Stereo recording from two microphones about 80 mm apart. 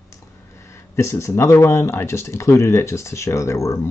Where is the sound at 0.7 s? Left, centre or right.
Left.